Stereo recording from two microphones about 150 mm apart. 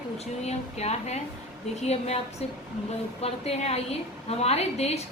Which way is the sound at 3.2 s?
40° left (ahead or behind).